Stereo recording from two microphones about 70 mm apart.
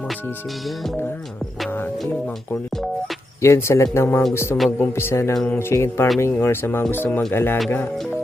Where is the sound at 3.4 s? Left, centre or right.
Left.